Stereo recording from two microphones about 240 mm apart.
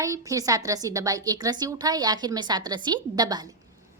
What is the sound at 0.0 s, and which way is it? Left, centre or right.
A woman's voice, centre.